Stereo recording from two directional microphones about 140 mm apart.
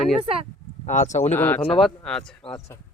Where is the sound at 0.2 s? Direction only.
40° right (ahead or behind).